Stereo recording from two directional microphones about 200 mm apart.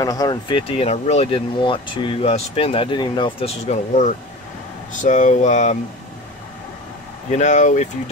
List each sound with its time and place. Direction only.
0.0 s speech: 20° left (ahead or behind); by 5.8 s 35° left (ahead or behind)
7.2 s speech: 35° left (ahead or behind)